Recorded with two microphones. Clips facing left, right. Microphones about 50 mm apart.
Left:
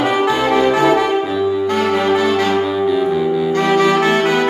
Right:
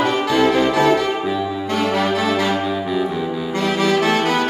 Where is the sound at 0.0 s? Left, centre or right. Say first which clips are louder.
Left 3 dB; centre.